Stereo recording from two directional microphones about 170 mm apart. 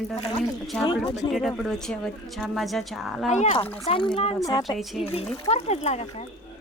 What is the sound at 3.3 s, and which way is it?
Speech, 40° left (ahead or behind).